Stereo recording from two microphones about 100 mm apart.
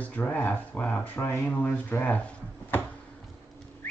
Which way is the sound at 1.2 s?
30° left (ahead or behind).